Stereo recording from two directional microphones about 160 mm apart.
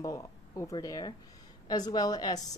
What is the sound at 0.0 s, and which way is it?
Speech, 20° left (ahead or behind).